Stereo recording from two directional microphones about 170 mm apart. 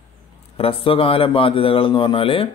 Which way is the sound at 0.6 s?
35° left (ahead or behind).